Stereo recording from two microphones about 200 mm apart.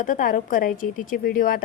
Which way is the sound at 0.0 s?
45° left (ahead or behind).